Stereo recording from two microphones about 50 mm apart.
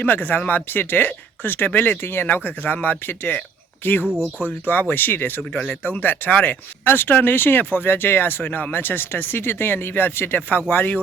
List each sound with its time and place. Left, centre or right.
0.0 s speech: left
2.2 s speech: left